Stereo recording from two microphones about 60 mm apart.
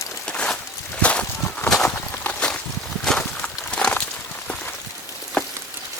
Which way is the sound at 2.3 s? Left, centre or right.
Centre.